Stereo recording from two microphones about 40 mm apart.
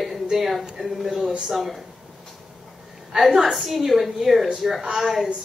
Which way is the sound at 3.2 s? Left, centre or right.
Centre.